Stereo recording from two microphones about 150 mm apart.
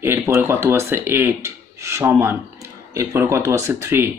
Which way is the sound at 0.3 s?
15° right (ahead or behind).